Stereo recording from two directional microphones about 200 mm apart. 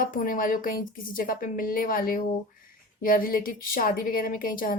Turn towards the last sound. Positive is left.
turn(degrees=45)  # may be behind; listen again after turning